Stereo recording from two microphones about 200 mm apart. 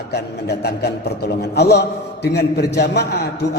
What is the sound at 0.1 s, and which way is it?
A man's voice, 55° left (ahead or behind).